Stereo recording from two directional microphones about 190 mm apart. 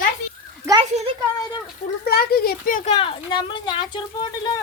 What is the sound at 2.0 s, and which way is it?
Speech, 55° left (ahead or behind).